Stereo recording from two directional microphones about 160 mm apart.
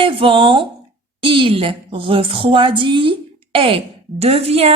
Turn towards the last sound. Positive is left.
turn(degrees=-40)  # may be behind; listen again after turning